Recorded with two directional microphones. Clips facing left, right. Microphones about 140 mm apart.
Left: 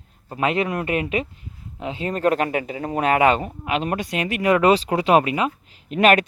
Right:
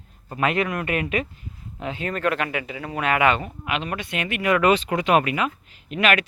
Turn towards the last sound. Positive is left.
turn(degrees=45)  # may be behind; listen again after turning